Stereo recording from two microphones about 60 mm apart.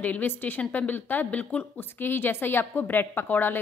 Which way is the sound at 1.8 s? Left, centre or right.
Left.